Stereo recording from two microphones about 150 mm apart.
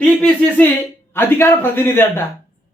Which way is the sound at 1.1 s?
15° left (ahead or behind).